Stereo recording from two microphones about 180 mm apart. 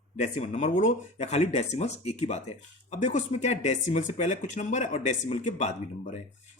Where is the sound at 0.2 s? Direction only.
40° left (ahead or behind).